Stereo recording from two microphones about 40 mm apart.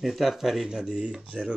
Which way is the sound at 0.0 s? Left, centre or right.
Centre.